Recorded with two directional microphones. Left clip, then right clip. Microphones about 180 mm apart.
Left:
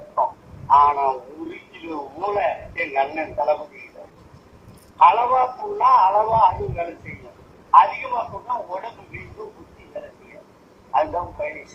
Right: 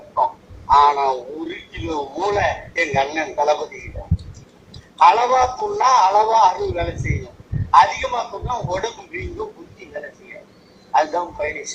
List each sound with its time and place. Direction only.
0.7 s a sound: 25° right (ahead or behind)
4.9 s speech: 25° right (ahead or behind)
10.9 s speech: 25° right (ahead or behind)